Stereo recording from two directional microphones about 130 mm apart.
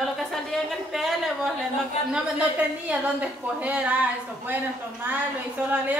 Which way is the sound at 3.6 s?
10° right (ahead or behind).